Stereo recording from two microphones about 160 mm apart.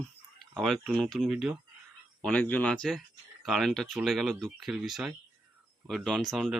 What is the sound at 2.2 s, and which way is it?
Speech, 10° left (ahead or behind).